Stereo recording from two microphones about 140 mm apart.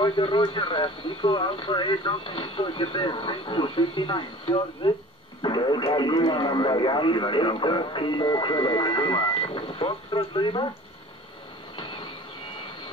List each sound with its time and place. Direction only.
0.0 s speech: 40° left (ahead or behind)
5.4 s radio: 35° left (ahead or behind)
5.9 s speech: 35° left (ahead or behind)
11.7 s a sound: 40° left (ahead or behind)